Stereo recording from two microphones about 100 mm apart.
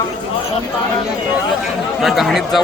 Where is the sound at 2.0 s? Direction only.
Centre (ahead or behind).